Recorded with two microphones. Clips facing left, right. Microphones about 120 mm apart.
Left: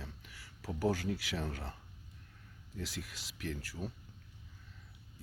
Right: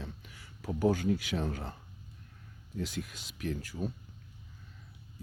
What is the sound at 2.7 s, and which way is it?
Speech, 20° right (ahead or behind).